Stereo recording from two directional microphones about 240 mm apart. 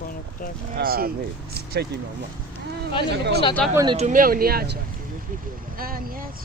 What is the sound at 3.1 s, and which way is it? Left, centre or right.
Speech, right.